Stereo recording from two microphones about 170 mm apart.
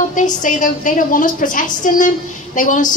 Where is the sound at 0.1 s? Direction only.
50° left (ahead or behind).